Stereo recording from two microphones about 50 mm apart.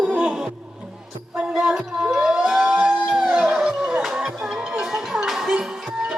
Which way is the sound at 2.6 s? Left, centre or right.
Right.